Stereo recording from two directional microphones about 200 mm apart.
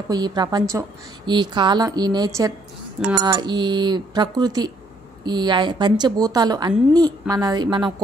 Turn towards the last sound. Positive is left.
turn(degrees=-20)  # may be behind; listen again after turning